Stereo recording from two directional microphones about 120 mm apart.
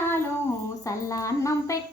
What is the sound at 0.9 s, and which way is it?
Speech, 30° left (ahead or behind).